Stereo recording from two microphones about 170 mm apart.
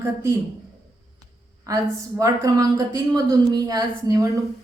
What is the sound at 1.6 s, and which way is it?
Speech, 20° right (ahead or behind).